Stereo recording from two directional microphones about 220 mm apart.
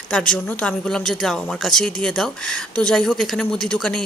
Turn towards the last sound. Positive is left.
turn(degrees=5)  # may be behind; listen again after turning